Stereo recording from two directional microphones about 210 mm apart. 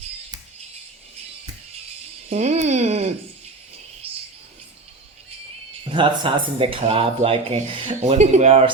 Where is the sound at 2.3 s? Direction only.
30° right (ahead or behind).